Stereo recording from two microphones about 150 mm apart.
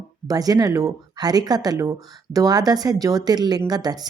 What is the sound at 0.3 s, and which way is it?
Speech, 25° right (ahead or behind).